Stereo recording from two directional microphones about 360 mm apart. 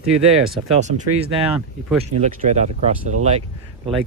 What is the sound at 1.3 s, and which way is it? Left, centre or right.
Speech, centre.